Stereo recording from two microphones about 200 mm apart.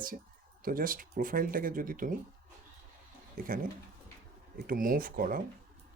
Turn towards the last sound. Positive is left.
turn(degrees=-45)  # may be behind; listen again after turning